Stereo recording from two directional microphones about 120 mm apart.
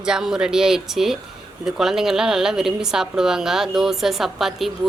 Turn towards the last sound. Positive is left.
turn(degrees=0)  # may be behind; listen again after turning